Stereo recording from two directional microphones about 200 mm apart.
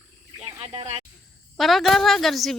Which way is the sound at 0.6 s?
30° right (ahead or behind).